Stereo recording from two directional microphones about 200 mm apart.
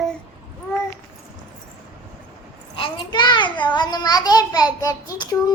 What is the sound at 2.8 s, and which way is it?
A child's voice, 25° left (ahead or behind).